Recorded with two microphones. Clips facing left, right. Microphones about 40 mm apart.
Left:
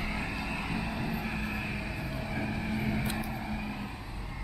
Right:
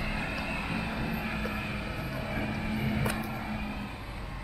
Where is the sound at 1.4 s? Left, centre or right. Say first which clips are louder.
Right 1 dB; centre.